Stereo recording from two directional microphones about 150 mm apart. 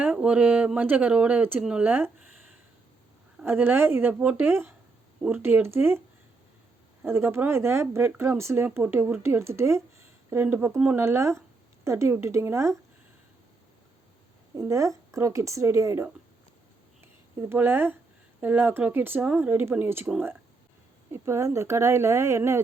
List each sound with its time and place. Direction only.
0.0 s speech: 10° right (ahead or behind)
3.4 s speech: 15° right (ahead or behind)
7.0 s speech: 15° right (ahead or behind)
14.5 s speech: 20° right (ahead or behind)
17.0 s a sound: 15° right (ahead or behind)
18.3 s speech: 10° right (ahead or behind)
21.1 s speech: 15° right (ahead or behind)